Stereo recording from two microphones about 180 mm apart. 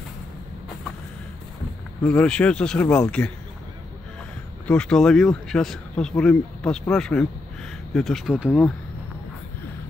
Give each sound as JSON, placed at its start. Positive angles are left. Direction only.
{"t": 2.0, "sound": "speech", "side_deg": 5}
{"t": 4.6, "sound": "speech", "side_deg": 5}